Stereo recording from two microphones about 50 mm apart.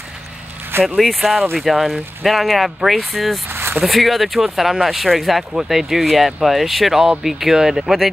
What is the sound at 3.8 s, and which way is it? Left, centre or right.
Speech, centre.